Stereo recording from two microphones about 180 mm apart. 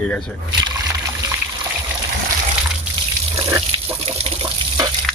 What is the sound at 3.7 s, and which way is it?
Water, 25° right (ahead or behind).